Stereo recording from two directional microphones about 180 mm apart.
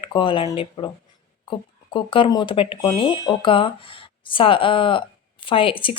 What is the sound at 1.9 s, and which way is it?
Speech, 30° left (ahead or behind).